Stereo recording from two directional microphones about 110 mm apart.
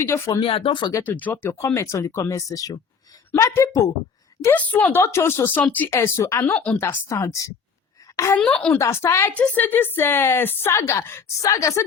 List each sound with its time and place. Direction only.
0.0 s speech: 25° left (ahead or behind)
0.3 s speech: 55° left (ahead or behind)
1.0 s speech: 15° left (ahead or behind)
4.5 s a woman's voice: 15° left (ahead or behind)
8.4 s a woman's voice: 10° left (ahead or behind)
8.8 s speech: 25° left (ahead or behind)